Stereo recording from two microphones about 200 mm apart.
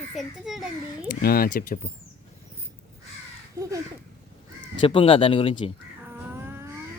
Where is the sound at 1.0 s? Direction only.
50° left (ahead or behind).